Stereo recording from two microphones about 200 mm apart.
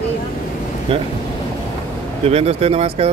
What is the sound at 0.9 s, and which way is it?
Speech, 25° right (ahead or behind).